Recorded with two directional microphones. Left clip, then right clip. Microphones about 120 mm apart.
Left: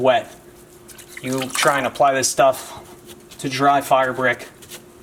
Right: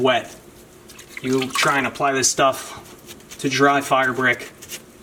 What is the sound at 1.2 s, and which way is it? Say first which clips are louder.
Speech: even; 30° left (ahead or behind).